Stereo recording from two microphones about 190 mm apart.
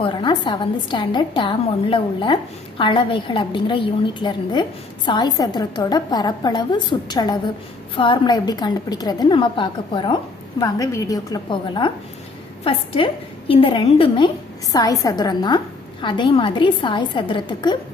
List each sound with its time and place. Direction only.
0.0 s a woman's voice: 25° left (ahead or behind)